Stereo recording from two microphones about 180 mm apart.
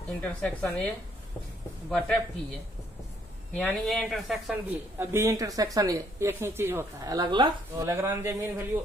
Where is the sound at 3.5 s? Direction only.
5° left (ahead or behind).